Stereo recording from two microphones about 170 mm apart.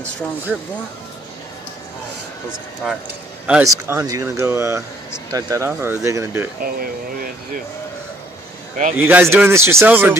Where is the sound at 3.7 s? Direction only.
20° right (ahead or behind).